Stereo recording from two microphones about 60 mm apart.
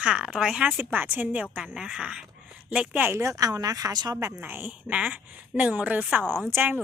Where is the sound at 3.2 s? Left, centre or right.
Right.